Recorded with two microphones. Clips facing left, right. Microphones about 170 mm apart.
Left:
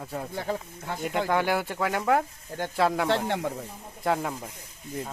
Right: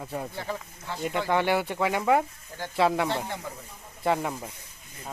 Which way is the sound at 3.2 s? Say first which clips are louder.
Left 7 dB; 75° left (ahead or behind).